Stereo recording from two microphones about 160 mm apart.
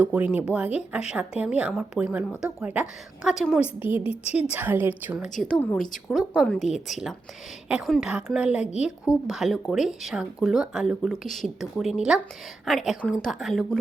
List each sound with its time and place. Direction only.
0.0 s a woman's voice: 10° right (ahead or behind)
4.1 s a woman's voice: 40° left (ahead or behind)
4.5 s a woman's voice: 10° right (ahead or behind)
5.4 s speech: 5° left (ahead or behind)